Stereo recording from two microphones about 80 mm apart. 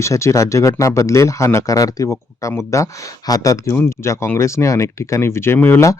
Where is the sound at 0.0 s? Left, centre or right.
Left.